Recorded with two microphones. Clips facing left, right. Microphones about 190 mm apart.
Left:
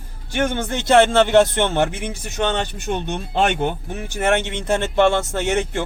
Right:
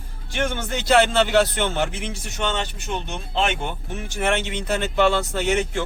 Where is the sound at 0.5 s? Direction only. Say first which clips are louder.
Left 3 dB; 50° left (ahead or behind).